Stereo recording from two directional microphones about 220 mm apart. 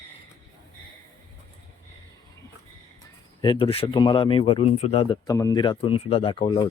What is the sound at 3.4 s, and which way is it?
Speech, 25° left (ahead or behind).